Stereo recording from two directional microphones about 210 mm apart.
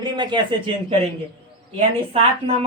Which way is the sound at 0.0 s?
20° right (ahead or behind).